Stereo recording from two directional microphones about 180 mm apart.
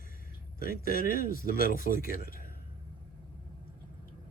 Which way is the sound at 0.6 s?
50° left (ahead or behind).